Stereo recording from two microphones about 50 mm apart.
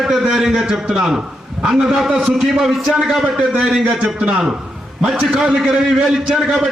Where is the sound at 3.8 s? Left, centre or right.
Right.